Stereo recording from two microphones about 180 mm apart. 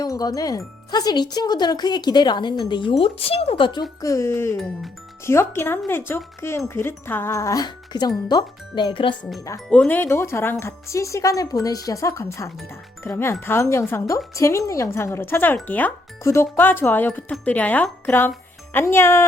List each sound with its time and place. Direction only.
0.0 s speech: 20° left (ahead or behind)
9.6 s speech: 10° left (ahead or behind)